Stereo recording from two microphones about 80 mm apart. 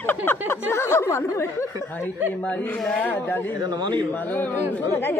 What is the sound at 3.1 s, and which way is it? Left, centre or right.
Speech, left.